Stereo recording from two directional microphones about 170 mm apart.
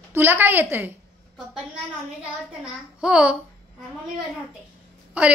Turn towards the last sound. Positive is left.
turn(degrees=-10)  # may be behind; listen again after turning